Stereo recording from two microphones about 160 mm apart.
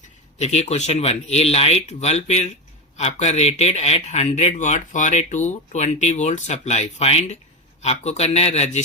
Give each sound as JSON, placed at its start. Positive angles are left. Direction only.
{"t": 0.3, "sound": "speech", "side_deg": 45}